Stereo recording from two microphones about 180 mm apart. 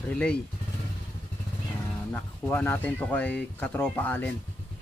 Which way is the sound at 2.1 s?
10° left (ahead or behind).